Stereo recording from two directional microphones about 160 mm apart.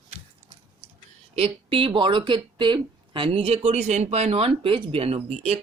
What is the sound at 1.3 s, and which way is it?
Speech, 35° right (ahead or behind).